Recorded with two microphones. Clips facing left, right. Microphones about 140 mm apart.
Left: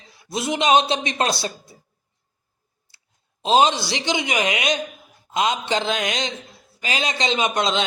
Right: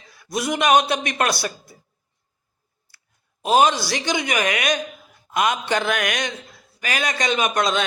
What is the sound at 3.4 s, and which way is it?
A man's voice, 20° left (ahead or behind).